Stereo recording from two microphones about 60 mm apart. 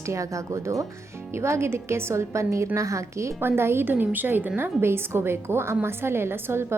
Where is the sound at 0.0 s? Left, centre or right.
Right.